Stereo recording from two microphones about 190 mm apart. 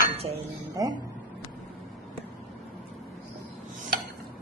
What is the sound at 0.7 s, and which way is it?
Speech, 20° right (ahead or behind).